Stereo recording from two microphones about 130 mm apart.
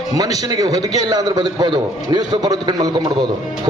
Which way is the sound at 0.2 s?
30° right (ahead or behind).